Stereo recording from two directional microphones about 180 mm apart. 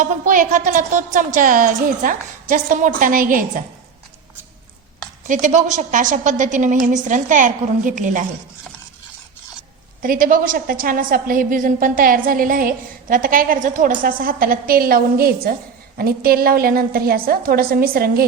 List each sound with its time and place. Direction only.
0.0 s a woman's voice: 45° right (ahead or behind)
5.3 s a woman's voice: 45° right (ahead or behind)
10.0 s a woman's voice: 50° right (ahead or behind)